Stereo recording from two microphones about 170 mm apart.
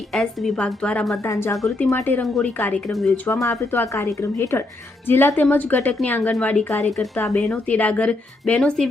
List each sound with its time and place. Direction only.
0.1 s a woman's voice: centre (ahead or behind)
2.2 s a woman's voice: centre (ahead or behind)
3.4 s a woman's voice: 15° left (ahead or behind)